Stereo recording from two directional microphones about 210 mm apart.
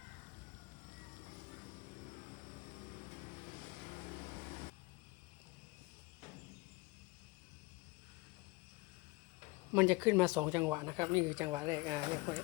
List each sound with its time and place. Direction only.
9.7 s speech: 15° right (ahead or behind)